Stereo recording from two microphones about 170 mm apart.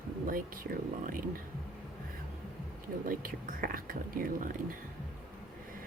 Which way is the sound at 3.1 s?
55° right (ahead or behind).